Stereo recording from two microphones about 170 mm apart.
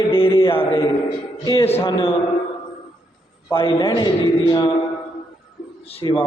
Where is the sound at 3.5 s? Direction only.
35° left (ahead or behind).